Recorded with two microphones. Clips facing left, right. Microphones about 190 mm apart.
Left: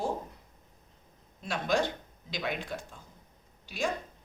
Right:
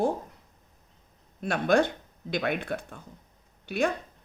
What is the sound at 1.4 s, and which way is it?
Speech, 55° right (ahead or behind).